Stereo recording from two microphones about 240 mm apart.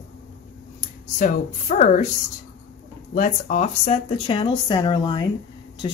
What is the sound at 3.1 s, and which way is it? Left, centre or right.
A woman's voice, left.